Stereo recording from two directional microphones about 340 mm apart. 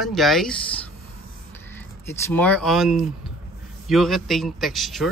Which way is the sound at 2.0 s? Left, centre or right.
Centre.